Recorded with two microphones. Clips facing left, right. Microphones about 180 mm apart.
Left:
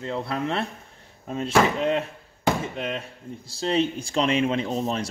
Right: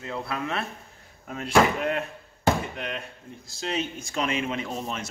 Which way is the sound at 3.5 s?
35° left (ahead or behind).